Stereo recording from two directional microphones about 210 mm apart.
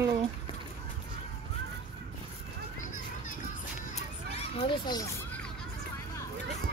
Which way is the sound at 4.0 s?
25° left (ahead or behind).